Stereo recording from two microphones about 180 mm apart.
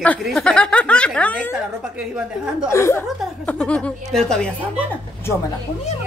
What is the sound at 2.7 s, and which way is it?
Speech, 15° left (ahead or behind).